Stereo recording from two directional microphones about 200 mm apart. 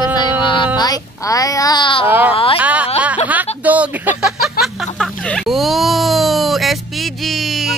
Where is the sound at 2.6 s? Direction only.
5° right (ahead or behind).